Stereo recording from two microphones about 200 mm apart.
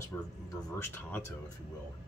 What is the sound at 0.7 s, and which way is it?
Speech, 10° left (ahead or behind).